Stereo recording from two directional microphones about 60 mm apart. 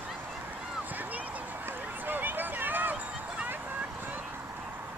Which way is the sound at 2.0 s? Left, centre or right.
Right.